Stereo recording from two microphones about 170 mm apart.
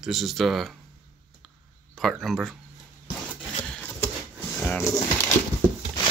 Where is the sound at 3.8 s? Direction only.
10° left (ahead or behind).